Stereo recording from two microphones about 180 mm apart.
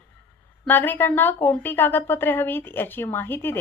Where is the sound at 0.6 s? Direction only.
10° left (ahead or behind).